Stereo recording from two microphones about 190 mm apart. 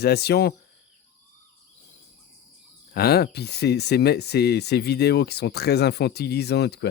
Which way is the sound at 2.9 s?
55° left (ahead or behind).